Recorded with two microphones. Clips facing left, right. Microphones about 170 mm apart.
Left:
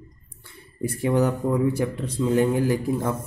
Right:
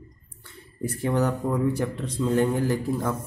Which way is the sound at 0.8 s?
10° left (ahead or behind).